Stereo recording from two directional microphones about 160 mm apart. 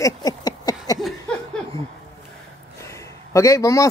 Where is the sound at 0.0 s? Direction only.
25° left (ahead or behind).